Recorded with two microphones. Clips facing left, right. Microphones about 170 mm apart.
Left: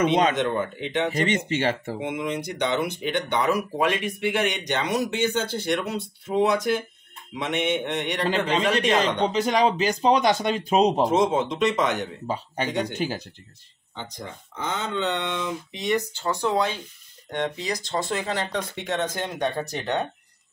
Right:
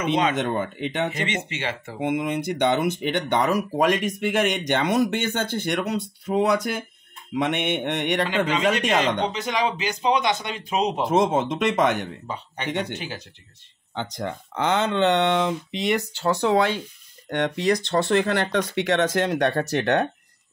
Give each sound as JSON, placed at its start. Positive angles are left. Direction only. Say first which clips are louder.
{"t": 1.1, "sound": "speech", "louder": "left 5 dB", "side_deg": 40}
{"t": 2.0, "sound": "speech", "louder": "right 4 dB", "side_deg": -55}
{"t": 7.4, "sound": "speech", "louder": "left 1 dB", "side_deg": -60}
{"t": 8.5, "sound": "speech", "louder": "even", "side_deg": 35}
{"t": 11.1, "sound": "speech", "louder": "right 1 dB", "side_deg": -55}
{"t": 12.3, "sound": "speech", "louder": "left 5 dB", "side_deg": 40}
{"t": 13.9, "sound": "speech", "louder": "right 7 dB", "side_deg": -80}
{"t": 17.3, "sound": "speech", "louder": "right 6 dB", "side_deg": -65}